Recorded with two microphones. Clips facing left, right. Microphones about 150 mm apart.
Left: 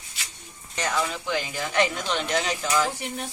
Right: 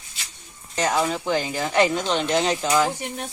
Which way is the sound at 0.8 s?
40° right (ahead or behind).